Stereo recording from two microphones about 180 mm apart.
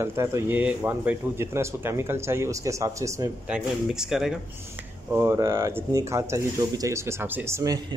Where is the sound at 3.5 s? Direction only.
5° right (ahead or behind).